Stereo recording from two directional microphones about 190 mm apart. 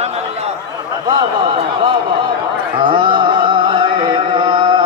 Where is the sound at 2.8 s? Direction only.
25° right (ahead or behind).